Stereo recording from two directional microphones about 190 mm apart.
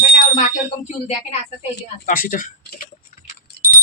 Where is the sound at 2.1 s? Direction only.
45° left (ahead or behind).